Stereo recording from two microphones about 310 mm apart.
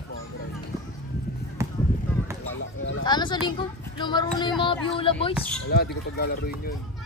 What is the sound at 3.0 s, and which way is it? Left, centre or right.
Speech, centre.